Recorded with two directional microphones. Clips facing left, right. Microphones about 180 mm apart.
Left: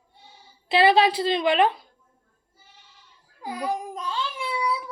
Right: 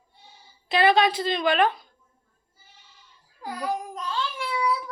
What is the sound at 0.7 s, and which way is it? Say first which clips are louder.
A woman's voice: left 2 dB; 30° left (ahead or behind).